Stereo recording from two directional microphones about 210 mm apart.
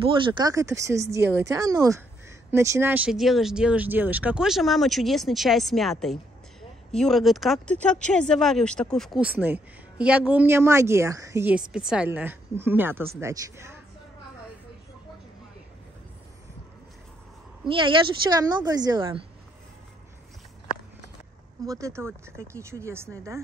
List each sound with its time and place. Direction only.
0.0 s speech: 25° right (ahead or behind)
17.6 s speech: 25° right (ahead or behind)
21.6 s speech: 15° right (ahead or behind)